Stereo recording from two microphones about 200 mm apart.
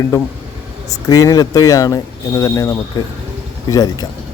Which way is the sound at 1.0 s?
15° left (ahead or behind).